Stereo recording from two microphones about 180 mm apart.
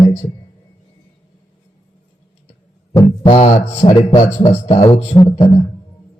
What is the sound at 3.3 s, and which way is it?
Speech, 40° left (ahead or behind).